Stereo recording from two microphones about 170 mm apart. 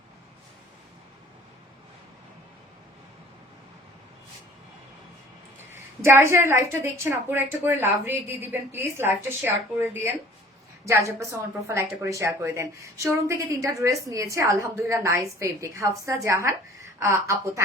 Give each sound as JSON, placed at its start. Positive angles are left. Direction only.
{"t": 5.7, "sound": "a woman's voice", "side_deg": -15}